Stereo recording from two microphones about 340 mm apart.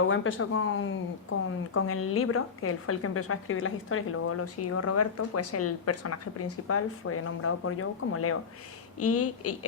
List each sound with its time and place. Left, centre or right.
0.0 s a woman's voice: left